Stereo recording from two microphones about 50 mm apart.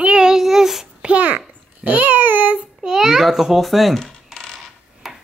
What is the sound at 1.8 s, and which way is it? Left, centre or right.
Babbling, right.